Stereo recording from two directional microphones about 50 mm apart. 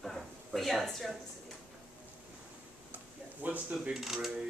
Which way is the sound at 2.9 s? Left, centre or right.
Right.